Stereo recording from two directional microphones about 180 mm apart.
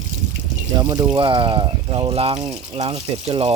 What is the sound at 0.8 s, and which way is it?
Speech, 20° right (ahead or behind).